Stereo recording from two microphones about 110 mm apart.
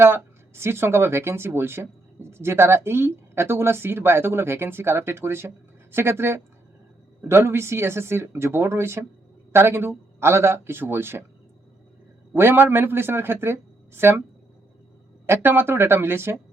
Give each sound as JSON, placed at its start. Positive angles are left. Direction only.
{"t": 0.0, "sound": "speech", "side_deg": -20}
{"t": 12.3, "sound": "speech", "side_deg": -20}
{"t": 15.3, "sound": "speech", "side_deg": -20}